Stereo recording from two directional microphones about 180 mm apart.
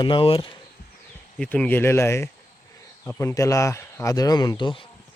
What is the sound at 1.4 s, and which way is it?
Speech, 10° left (ahead or behind).